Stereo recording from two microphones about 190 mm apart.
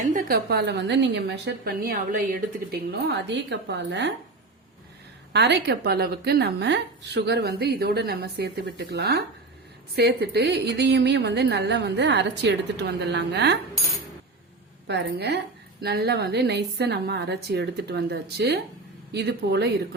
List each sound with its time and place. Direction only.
0.0 s a woman's voice: 45° right (ahead or behind); by 4.1 s 65° right (ahead or behind)
5.3 s a woman's voice: 65° right (ahead or behind)
14.8 s a woman's voice: 60° right (ahead or behind)